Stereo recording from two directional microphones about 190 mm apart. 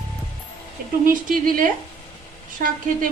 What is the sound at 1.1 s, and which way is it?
Speech, 45° right (ahead or behind).